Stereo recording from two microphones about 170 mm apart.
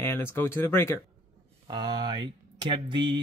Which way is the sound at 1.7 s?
25° right (ahead or behind).